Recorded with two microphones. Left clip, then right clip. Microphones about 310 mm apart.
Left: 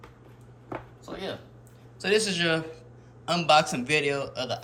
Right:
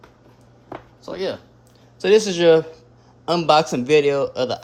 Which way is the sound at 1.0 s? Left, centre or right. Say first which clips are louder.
Right 12 dB; right.